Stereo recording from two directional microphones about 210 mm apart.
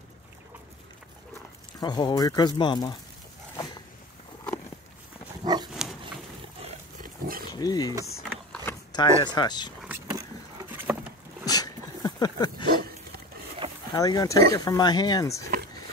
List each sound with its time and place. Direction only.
1.8 s speech: 20° left (ahead or behind)
5.4 s dog: 20° right (ahead or behind)
6.6 s wild animals: 40° right (ahead or behind)
7.5 s speech: 20° left (ahead or behind)
9.8 s vehicle: 10° right (ahead or behind)
11.4 s dog: 20° left (ahead or behind)
13.6 s vehicle: 25° right (ahead or behind)
13.9 s speech: 15° left (ahead or behind)